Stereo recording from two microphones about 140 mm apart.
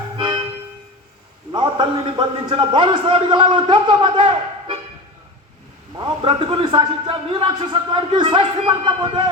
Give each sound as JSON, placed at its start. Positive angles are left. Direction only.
{"t": 0.2, "sound": "music", "side_deg": -30}
{"t": 2.0, "sound": "a man's voice", "side_deg": -35}
{"t": 6.0, "sound": "a man's voice", "side_deg": -35}